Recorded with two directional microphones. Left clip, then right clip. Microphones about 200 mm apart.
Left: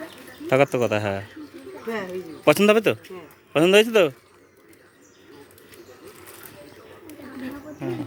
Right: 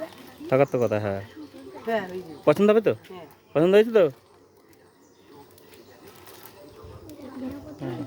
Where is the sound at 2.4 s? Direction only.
5° right (ahead or behind).